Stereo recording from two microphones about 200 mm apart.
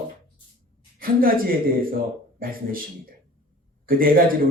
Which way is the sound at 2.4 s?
45° right (ahead or behind).